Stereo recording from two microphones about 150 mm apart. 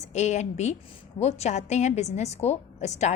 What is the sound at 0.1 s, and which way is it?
A woman's voice, 50° left (ahead or behind).